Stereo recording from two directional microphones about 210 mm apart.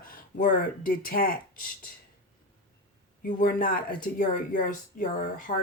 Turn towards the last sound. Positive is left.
turn(degrees=40)  # may be behind; listen again after turning